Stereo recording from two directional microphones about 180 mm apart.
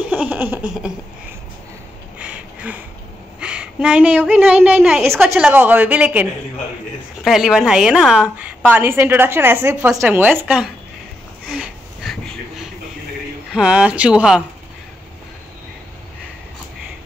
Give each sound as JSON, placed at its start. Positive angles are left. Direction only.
{"t": 0.1, "sound": "a woman's voice", "side_deg": -10}
{"t": 2.1, "sound": "a sound", "side_deg": -5}
{"t": 3.3, "sound": "a woman's voice", "side_deg": -5}
{"t": 7.2, "sound": "a woman's voice", "side_deg": 0}
{"t": 11.4, "sound": "a sound", "side_deg": -5}
{"t": 13.5, "sound": "speech", "side_deg": -5}